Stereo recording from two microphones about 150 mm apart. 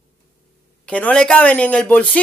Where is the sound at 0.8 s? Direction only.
10° left (ahead or behind).